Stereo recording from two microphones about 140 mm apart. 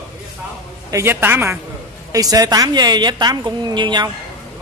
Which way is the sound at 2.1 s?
25° right (ahead or behind).